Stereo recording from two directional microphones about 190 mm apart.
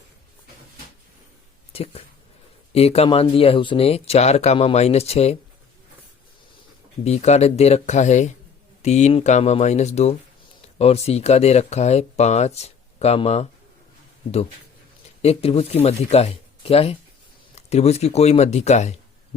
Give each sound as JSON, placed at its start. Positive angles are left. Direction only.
{"t": 1.7, "sound": "speech", "side_deg": 30}
{"t": 7.0, "sound": "speech", "side_deg": 35}
{"t": 15.2, "sound": "speech", "side_deg": 30}